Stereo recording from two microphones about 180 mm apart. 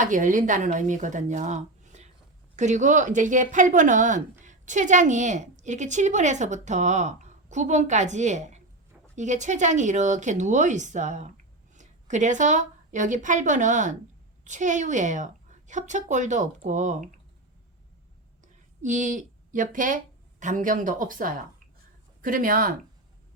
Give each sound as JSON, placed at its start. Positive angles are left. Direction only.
{"t": 0.0, "sound": "a woman's voice", "side_deg": -45}
{"t": 18.8, "sound": "a woman's voice", "side_deg": -45}